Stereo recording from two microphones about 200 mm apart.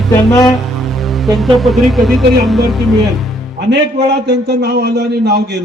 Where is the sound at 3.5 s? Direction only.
55° right (ahead or behind).